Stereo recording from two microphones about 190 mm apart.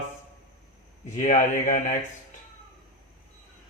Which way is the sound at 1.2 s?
40° left (ahead or behind).